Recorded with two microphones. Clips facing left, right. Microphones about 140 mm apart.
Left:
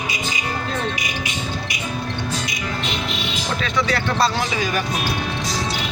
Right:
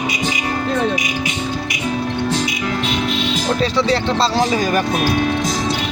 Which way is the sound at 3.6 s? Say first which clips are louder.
Right 4 dB; 30° right (ahead or behind).